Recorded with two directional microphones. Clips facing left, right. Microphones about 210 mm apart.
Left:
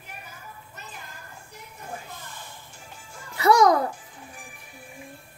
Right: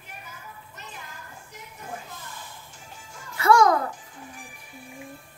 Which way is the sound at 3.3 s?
20° left (ahead or behind).